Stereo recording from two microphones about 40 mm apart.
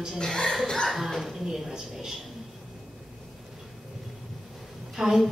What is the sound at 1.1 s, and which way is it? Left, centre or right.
A woman's voice, centre.